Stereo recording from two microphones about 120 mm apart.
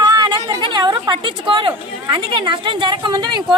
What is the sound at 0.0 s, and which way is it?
A woman's voice, 35° right (ahead or behind).